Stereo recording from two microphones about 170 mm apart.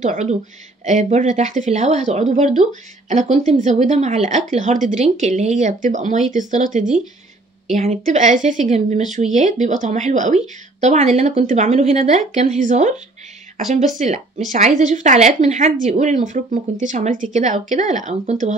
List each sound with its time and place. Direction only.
0.0 s speech: 45° right (ahead or behind)